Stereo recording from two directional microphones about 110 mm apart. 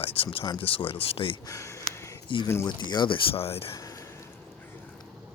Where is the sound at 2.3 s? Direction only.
50° left (ahead or behind).